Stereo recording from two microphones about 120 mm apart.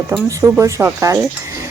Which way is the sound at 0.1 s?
25° right (ahead or behind).